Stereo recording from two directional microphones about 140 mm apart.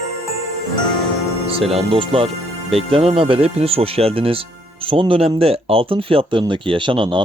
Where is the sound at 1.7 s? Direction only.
40° right (ahead or behind).